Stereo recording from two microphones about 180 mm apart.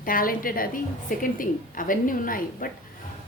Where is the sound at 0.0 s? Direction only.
50° left (ahead or behind).